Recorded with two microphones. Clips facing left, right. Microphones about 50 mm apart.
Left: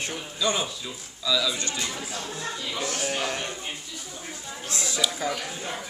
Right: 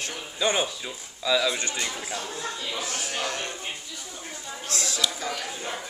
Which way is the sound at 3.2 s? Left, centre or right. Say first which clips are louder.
Left 1 dB; left.